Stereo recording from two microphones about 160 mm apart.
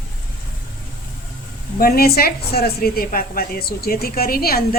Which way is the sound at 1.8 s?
75° left (ahead or behind).